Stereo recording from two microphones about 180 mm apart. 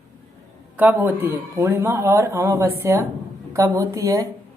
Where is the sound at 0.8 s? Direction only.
10° right (ahead or behind).